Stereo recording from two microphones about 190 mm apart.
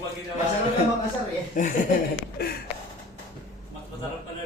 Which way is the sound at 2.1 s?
55° left (ahead or behind).